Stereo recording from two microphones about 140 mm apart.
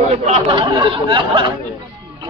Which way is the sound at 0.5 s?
35° right (ahead or behind).